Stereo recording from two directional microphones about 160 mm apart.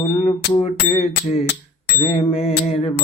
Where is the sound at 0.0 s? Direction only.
45° left (ahead or behind).